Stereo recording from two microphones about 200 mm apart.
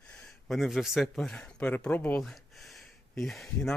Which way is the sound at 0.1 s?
Centre (ahead or behind).